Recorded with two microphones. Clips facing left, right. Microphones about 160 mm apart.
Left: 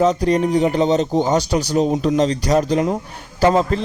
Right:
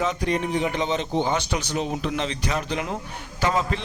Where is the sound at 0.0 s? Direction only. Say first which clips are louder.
Left 9 dB; 35° left (ahead or behind).